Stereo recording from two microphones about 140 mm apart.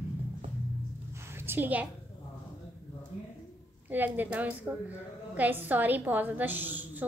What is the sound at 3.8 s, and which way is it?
A woman's voice, 15° right (ahead or behind).